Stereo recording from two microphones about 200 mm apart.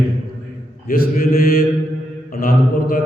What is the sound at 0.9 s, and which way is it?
A man's voice, 45° left (ahead or behind).